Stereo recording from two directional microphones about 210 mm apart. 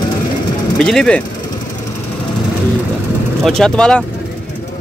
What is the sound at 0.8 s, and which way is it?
Speech, 5° left (ahead or behind).